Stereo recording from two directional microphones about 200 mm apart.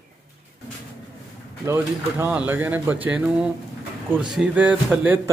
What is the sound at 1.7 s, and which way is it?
Speech, 10° right (ahead or behind).